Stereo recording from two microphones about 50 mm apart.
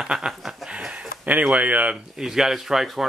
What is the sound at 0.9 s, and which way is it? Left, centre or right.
Speech, right.